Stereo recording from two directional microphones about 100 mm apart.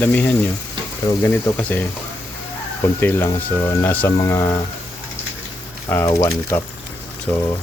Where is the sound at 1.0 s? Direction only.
45° left (ahead or behind).